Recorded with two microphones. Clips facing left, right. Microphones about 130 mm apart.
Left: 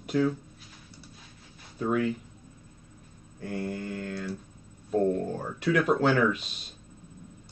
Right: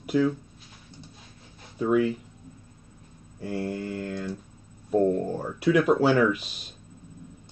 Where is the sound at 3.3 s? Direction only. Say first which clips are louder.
Right 3 dB; 5° right (ahead or behind).